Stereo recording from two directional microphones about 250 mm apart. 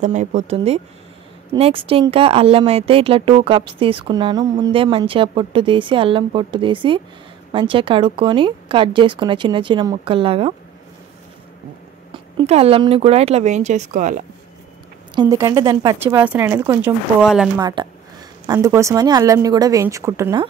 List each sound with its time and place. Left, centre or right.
0.0 s speech: right
12.1 s speech: right
15.1 s speech: centre
17.6 s speech: centre